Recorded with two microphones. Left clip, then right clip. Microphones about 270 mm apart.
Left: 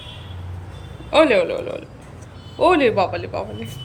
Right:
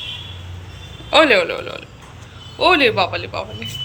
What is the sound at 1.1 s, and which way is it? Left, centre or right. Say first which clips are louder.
A man's voice: right 2 dB; centre.